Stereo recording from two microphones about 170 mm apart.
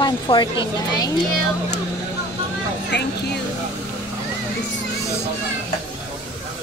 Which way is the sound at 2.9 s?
90° left.